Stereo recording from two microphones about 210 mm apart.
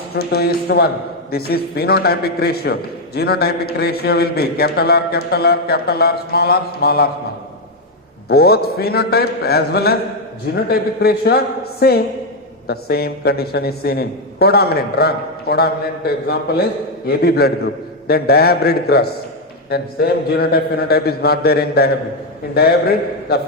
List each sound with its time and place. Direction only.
0.1 s a man's voice: 50° left (ahead or behind)
8.3 s a man's voice: 50° left (ahead or behind)